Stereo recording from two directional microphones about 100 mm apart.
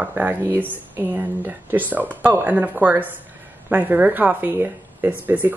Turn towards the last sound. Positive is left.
turn(degrees=-15)  # may be behind; listen again after turning